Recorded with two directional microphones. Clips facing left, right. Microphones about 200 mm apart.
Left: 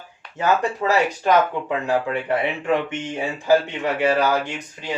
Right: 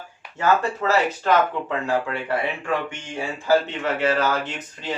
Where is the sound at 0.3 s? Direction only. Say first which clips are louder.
Even; 15° left (ahead or behind).